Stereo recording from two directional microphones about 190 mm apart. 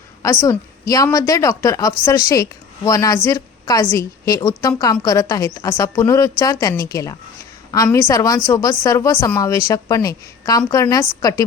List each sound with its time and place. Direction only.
0.2 s a woman's voice: 15° left (ahead or behind)